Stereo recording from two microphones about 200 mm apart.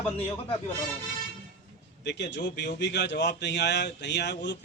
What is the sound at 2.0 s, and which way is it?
A man's voice, 60° left (ahead or behind).